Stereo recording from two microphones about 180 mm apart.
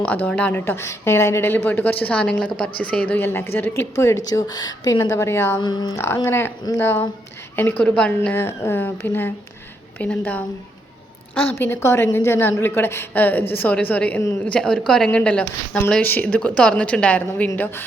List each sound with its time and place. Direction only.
0.3 s speech: 5° left (ahead or behind)
11.4 s speech: 10° left (ahead or behind)